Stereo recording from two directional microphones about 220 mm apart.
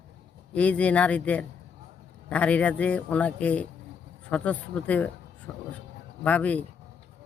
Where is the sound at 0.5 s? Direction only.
5° left (ahead or behind).